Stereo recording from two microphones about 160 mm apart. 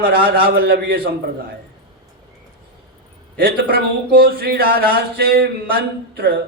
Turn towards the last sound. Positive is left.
turn(degrees=-75)  # may be behind; listen again after turning